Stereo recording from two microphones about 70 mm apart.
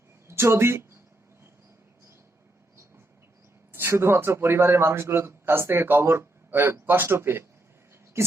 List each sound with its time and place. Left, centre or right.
0.3 s speech: right
3.7 s a man's voice: right